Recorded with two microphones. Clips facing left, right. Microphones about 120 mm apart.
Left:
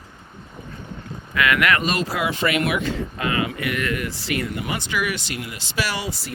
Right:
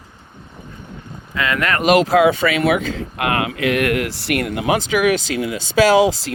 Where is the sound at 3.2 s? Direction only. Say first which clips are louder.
Right 6 dB; 70° right (ahead or behind).